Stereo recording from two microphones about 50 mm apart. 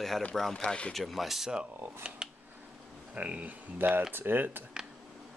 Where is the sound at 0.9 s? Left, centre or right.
Centre.